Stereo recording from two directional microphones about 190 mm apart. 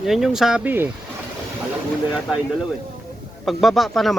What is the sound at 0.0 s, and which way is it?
Speech, centre (ahead or behind).